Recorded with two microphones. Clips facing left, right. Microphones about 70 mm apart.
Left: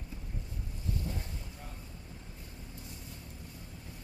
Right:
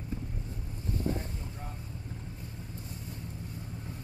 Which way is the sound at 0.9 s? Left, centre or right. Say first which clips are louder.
Right 9 dB; right.